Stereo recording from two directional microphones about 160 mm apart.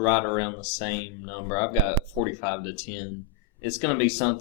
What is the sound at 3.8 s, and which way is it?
Speech, 20° left (ahead or behind).